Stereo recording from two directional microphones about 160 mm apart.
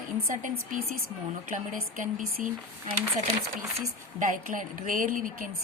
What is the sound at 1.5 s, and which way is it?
Speech, 55° right (ahead or behind).